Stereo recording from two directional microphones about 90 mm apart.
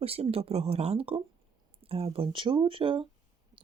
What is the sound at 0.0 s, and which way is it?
Speech, 90° right.